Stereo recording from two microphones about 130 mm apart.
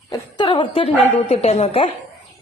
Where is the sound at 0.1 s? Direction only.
35° left (ahead or behind).